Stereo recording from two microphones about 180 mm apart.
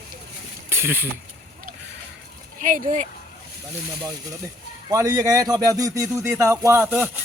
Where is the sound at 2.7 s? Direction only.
45° right (ahead or behind).